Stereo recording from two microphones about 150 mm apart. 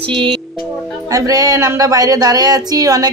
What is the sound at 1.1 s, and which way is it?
Speech, 25° right (ahead or behind).